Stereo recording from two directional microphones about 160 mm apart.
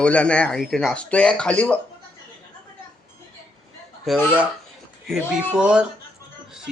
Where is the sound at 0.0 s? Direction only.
5° left (ahead or behind).